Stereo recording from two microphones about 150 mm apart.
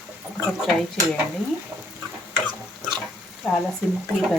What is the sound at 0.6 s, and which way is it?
Speech, centre (ahead or behind).